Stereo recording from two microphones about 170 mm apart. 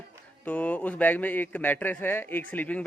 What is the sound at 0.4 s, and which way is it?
Speech, 10° left (ahead or behind).